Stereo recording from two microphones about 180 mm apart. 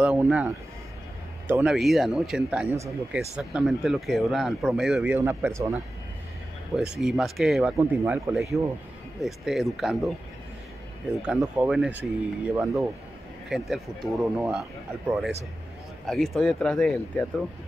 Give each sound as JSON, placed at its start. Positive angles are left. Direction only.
{"t": 0.0, "sound": "speech", "side_deg": -5}
{"t": 1.5, "sound": "speech", "side_deg": -5}
{"t": 2.7, "sound": "speech", "side_deg": -15}
{"t": 3.3, "sound": "speech", "side_deg": -5}
{"t": 6.7, "sound": "speech", "side_deg": -5}
{"t": 11.2, "sound": "speech", "side_deg": -5}